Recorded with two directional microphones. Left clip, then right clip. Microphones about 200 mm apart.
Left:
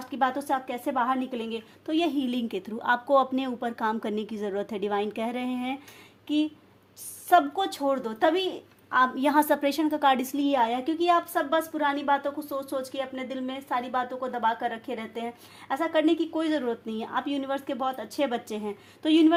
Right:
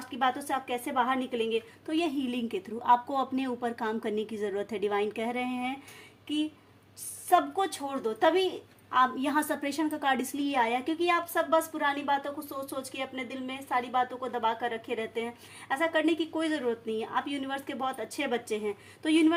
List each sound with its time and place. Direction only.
0.1 s a woman's voice: 30° left (ahead or behind)